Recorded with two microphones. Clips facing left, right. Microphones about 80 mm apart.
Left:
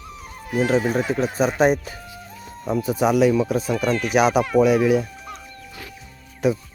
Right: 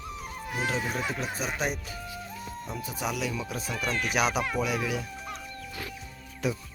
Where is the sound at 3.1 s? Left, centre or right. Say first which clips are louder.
Left 17 dB; left.